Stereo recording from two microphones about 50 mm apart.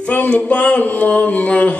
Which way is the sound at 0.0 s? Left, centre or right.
Left.